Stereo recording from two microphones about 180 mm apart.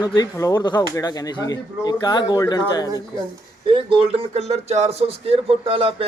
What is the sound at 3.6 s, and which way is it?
Speech, 30° right (ahead or behind).